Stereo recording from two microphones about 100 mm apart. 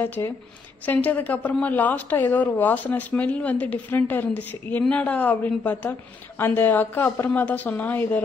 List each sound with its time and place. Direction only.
0.0 s a woman's voice: 20° left (ahead or behind)